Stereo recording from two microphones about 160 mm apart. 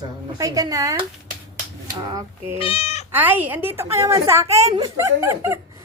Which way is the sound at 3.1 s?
10° right (ahead or behind).